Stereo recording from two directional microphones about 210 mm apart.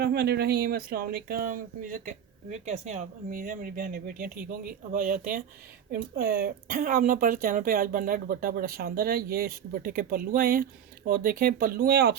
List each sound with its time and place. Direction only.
0.0 s speech: 50° right (ahead or behind)